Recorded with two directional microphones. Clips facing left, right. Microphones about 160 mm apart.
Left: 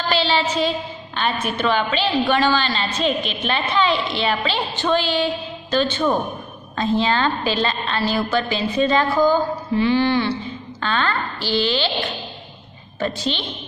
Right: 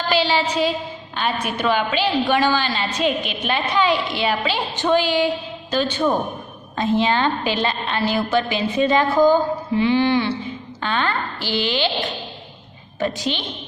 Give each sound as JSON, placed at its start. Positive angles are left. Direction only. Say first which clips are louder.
{"t": 0.1, "sound": "a woman's voice", "louder": "right 1 dB", "side_deg": -10}
{"t": 13.0, "sound": "a woman's voice", "louder": "right 1 dB", "side_deg": -10}